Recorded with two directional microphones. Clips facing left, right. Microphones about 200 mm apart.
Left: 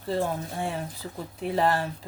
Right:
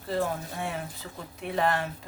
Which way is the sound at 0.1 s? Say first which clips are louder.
Left 2 dB; 30° left (ahead or behind).